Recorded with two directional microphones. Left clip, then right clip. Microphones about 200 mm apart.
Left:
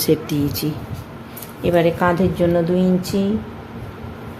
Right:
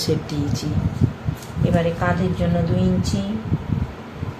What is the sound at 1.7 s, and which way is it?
Speech, 65° left (ahead or behind).